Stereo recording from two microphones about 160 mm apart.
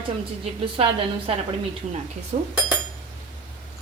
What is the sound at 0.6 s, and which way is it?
Speech, 35° right (ahead or behind).